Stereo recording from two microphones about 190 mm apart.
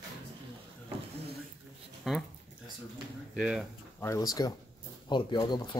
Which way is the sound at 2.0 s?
Centre (ahead or behind).